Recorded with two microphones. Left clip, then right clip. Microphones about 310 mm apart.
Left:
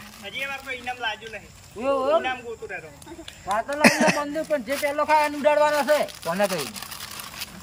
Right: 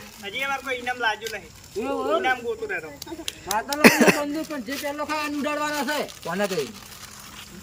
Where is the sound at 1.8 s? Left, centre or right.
Centre.